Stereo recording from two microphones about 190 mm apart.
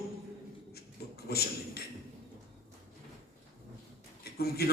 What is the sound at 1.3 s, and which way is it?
Speech, 55° left (ahead or behind).